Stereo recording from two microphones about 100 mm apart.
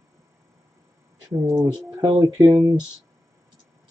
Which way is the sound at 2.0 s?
40° right (ahead or behind).